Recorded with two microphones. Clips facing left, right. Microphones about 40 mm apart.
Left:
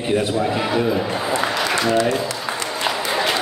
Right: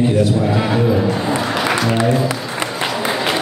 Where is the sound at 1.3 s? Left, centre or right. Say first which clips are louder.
Right 2 dB; right.